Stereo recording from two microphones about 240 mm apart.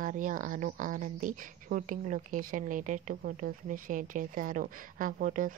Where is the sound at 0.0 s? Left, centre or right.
Right.